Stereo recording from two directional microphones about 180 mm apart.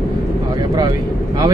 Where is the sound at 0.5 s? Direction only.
20° right (ahead or behind).